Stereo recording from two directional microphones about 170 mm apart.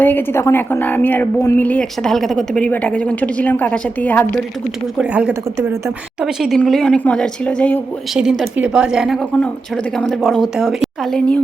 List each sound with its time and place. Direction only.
0.0 s a woman's voice: 10° left (ahead or behind)
4.9 s a woman's voice: 5° right (ahead or behind)